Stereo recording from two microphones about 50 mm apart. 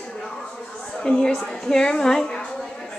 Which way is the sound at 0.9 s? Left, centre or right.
Centre.